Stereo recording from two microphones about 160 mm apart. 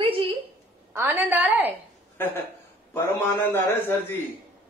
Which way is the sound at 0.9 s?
15° right (ahead or behind).